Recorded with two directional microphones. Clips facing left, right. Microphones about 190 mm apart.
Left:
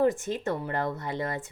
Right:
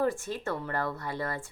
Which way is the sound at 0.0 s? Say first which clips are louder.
Left 4 dB; 20° left (ahead or behind).